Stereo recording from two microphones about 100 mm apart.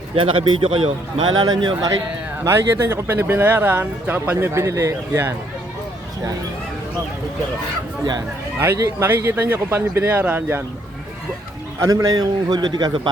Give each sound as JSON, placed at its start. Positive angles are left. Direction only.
{"t": 0.2, "sound": "a man's voice", "side_deg": -60}
{"t": 1.3, "sound": "speech", "side_deg": -45}
{"t": 2.4, "sound": "speech", "side_deg": -25}
{"t": 8.5, "sound": "speech", "side_deg": -25}
{"t": 11.9, "sound": "a man's voice", "side_deg": -35}